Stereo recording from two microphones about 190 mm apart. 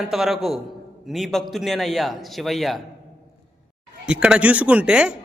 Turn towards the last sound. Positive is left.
turn(degrees=-5)  # may be behind; listen again after turning